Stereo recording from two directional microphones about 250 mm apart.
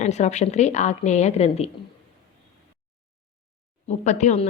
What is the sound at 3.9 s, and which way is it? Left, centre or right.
Speech, left.